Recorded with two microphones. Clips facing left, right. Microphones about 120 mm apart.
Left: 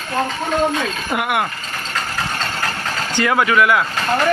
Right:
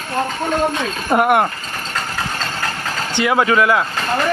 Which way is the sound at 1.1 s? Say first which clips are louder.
Right 7 dB; 40° right (ahead or behind).